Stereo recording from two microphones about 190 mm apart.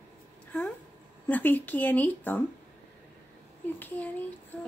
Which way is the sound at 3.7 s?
10° left (ahead or behind).